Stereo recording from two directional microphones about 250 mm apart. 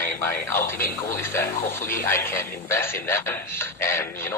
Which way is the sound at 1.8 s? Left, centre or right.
Left.